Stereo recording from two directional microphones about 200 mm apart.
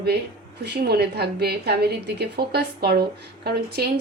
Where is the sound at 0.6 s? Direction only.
50° right (ahead or behind).